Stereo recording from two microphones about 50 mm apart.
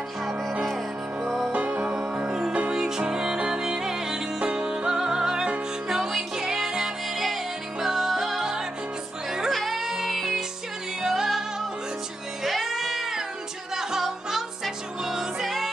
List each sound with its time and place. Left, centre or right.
1.2 s music: centre
1.5 s music: right
1.9 s music: centre
12.4 s music: centre